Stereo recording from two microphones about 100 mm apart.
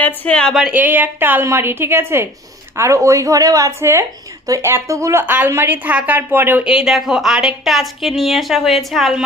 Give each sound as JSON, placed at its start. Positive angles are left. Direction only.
{"t": 0.0, "sound": "speech", "side_deg": 10}
{"t": 0.7, "sound": "a woman's voice", "side_deg": -15}
{"t": 5.2, "sound": "a woman's voice", "side_deg": -15}
{"t": 6.7, "sound": "a woman's voice", "side_deg": -5}